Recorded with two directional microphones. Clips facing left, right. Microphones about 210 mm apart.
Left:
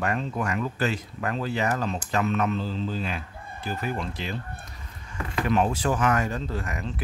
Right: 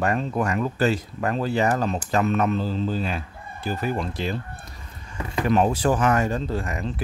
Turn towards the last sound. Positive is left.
turn(degrees=-30)  # may be behind; listen again after turning